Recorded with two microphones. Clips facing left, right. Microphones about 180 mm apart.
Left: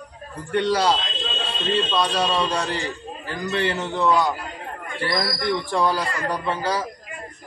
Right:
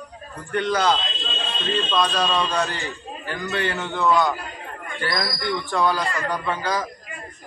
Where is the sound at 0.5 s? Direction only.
30° left (ahead or behind).